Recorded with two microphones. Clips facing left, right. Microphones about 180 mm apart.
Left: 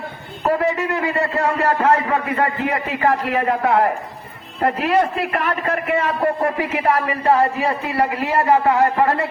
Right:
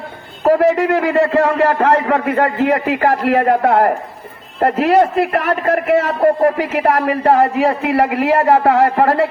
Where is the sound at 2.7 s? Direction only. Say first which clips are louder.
Right 4 dB; 45° right (ahead or behind).